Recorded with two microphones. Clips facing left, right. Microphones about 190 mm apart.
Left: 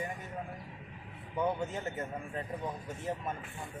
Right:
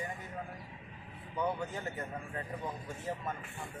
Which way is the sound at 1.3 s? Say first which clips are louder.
Left 2 dB; 20° left (ahead or behind).